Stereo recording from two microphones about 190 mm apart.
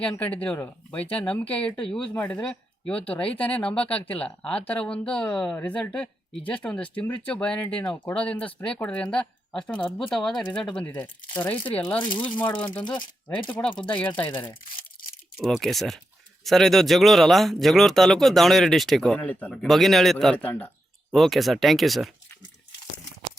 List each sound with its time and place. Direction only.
0.0 s speech: 5° left (ahead or behind)
12.8 s speech: 25° left (ahead or behind)
13.5 s speech: 5° left (ahead or behind)
15.4 s speech: centre (ahead or behind)